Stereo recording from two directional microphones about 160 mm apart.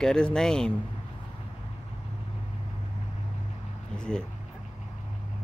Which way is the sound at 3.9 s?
5° left (ahead or behind).